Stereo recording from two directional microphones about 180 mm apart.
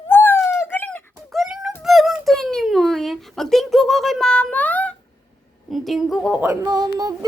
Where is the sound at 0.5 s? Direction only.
15° left (ahead or behind).